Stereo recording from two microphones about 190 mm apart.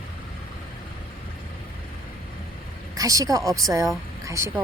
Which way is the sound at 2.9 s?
15° right (ahead or behind).